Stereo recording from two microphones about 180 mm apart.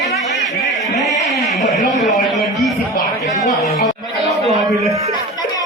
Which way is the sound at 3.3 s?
20° left (ahead or behind).